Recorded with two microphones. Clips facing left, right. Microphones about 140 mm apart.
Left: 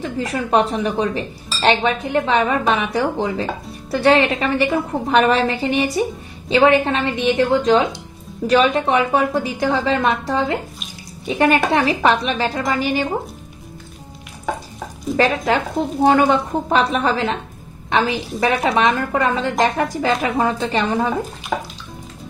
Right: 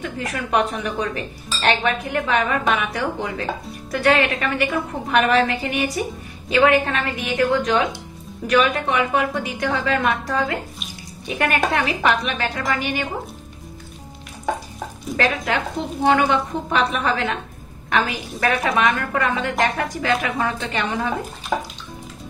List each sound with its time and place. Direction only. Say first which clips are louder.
0.0 s a woman's voice: left 4 dB; 30° left (ahead or behind)
15.1 s a woman's voice: left 4 dB; 35° left (ahead or behind)
21.5 s music: even; centre (ahead or behind)